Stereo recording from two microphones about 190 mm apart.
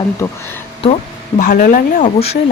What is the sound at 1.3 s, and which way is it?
Speech, 45° left (ahead or behind).